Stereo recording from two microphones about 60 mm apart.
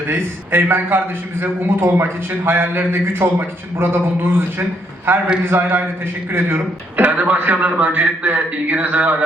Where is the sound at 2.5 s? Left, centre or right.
Right.